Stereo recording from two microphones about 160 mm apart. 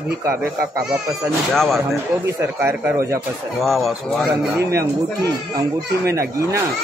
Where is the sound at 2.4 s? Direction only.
15° right (ahead or behind).